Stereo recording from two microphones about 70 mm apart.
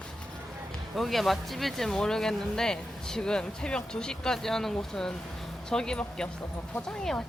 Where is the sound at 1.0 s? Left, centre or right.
Centre.